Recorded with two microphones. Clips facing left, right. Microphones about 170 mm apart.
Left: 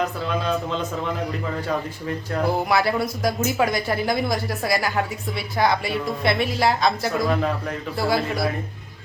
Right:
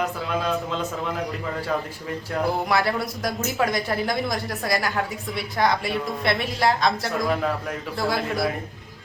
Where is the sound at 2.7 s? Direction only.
Centre (ahead or behind).